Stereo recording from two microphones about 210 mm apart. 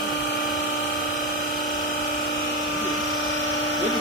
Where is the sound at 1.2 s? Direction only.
40° left (ahead or behind).